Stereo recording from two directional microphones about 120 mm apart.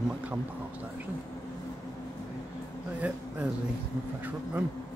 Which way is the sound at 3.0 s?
10° right (ahead or behind).